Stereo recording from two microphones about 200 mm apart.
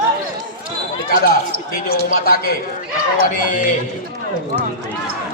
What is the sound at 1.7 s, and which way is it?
A man's voice, 45° left (ahead or behind).